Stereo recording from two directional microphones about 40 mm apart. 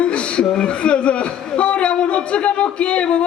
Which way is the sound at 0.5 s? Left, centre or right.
Left.